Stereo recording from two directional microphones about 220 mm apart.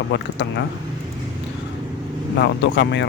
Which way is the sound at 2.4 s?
55° left (ahead or behind).